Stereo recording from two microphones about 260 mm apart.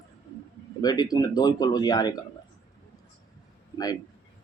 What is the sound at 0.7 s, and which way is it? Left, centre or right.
Speech, centre.